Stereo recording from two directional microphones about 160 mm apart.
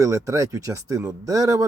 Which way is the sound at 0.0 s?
20° right (ahead or behind).